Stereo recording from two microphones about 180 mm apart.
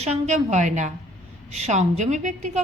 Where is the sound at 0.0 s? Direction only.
40° right (ahead or behind).